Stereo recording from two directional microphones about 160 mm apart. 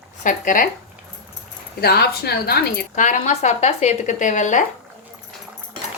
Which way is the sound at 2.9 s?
50° left (ahead or behind).